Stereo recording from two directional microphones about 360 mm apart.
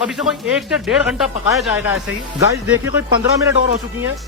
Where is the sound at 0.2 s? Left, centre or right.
Centre.